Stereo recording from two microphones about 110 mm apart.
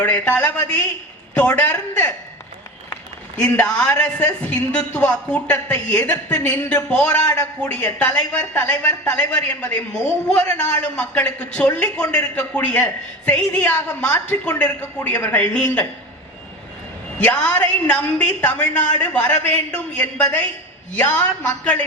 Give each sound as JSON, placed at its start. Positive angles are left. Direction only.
{"t": 0.0, "sound": "a man's voice", "side_deg": 15}
{"t": 3.3, "sound": "a man's voice", "side_deg": 15}
{"t": 17.2, "sound": "a man's voice", "side_deg": 10}